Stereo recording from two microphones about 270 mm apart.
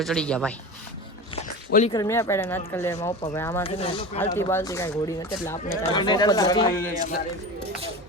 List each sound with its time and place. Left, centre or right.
0.0 s speech: centre
1.9 s speech: centre
3.6 s speech: left
4.2 s speech: centre